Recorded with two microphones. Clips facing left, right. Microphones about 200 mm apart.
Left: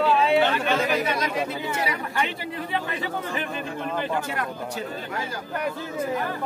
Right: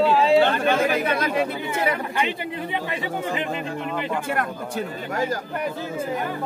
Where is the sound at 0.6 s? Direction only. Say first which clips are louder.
Right 3 dB; 55° right (ahead or behind).